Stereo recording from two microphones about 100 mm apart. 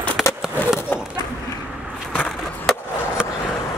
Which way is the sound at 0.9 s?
20° left (ahead or behind).